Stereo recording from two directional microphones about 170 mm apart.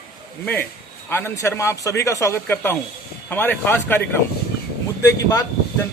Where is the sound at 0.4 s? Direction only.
10° left (ahead or behind).